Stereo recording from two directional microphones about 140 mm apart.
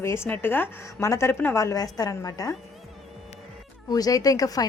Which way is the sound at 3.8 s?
25° left (ahead or behind).